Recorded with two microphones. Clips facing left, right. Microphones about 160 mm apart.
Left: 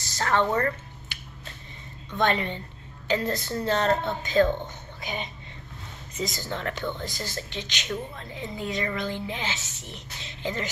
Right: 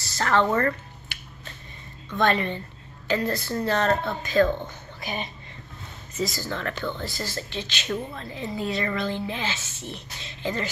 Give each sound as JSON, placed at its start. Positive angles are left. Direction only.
{"t": 0.1, "sound": "a woman's voice", "side_deg": 15}
{"t": 2.0, "sound": "a woman's voice", "side_deg": 20}